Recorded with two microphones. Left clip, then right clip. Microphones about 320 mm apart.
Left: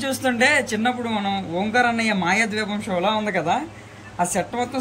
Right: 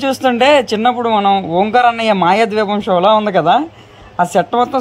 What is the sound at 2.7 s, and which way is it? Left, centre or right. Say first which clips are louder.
Speech: right 12 dB; right.